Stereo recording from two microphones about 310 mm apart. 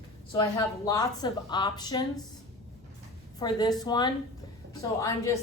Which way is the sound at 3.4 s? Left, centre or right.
Centre.